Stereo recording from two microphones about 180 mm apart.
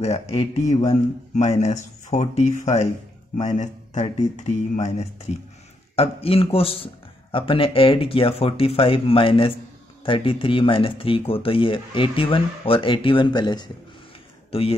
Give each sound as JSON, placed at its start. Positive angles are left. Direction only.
{"t": 0.0, "sound": "speech", "side_deg": 35}